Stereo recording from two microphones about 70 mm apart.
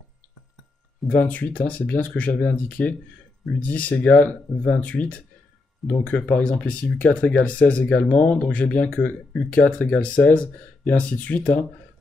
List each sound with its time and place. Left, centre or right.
1.0 s speech: left